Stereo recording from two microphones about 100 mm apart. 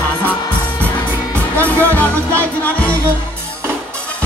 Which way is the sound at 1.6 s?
15° left (ahead or behind).